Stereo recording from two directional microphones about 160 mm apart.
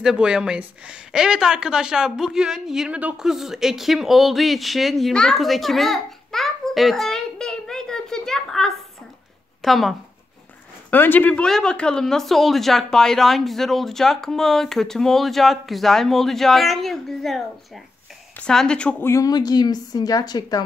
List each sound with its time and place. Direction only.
0.0 s speech: 5° right (ahead or behind)
10.9 s a woman's voice: 10° left (ahead or behind)